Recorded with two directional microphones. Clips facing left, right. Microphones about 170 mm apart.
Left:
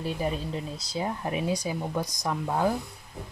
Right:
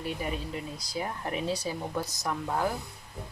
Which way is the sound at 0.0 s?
35° left (ahead or behind).